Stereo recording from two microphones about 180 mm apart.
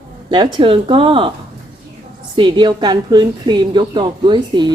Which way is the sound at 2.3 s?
25° right (ahead or behind).